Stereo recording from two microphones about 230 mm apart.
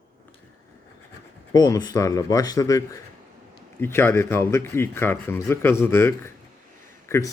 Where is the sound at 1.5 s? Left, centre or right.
Centre.